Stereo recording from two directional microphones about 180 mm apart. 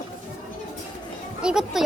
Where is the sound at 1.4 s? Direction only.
5° right (ahead or behind).